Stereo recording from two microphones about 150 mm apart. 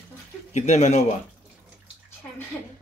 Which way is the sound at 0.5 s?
50° left (ahead or behind).